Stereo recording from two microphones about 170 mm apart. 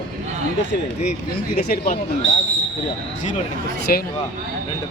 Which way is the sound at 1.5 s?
70° left (ahead or behind).